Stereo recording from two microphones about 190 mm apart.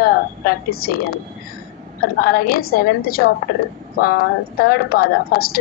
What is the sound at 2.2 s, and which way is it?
A woman's voice, 50° left (ahead or behind).